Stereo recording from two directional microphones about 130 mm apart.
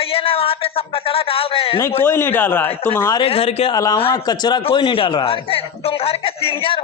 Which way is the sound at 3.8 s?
30° left (ahead or behind).